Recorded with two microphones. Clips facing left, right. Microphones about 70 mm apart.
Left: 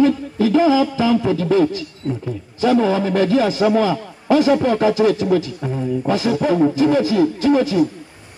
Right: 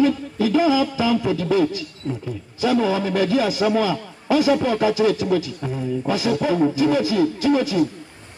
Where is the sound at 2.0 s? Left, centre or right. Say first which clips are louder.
Left 4 dB; centre.